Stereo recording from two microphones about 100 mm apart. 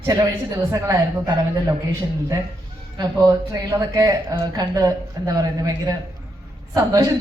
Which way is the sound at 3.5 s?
35° right (ahead or behind).